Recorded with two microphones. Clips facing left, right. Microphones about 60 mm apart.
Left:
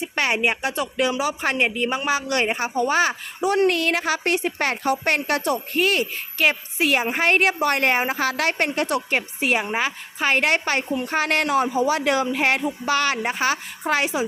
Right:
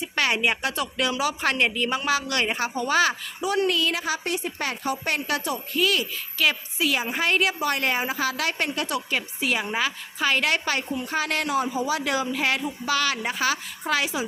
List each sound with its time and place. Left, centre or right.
0.0 s speech: left
3.4 s a woman's voice: left